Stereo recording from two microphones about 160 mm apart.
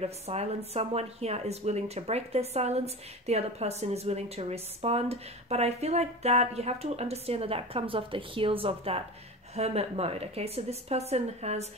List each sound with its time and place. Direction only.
0.0 s speech: 40° right (ahead or behind)